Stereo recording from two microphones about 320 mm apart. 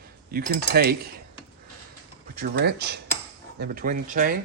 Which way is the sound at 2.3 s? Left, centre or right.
Right.